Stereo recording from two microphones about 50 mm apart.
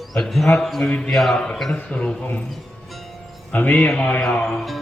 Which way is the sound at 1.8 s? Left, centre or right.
Left.